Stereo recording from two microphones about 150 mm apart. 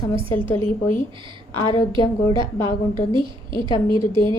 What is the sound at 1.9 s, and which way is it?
Speech, 30° right (ahead or behind).